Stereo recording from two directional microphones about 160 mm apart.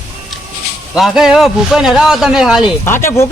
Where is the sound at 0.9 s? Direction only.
5° right (ahead or behind).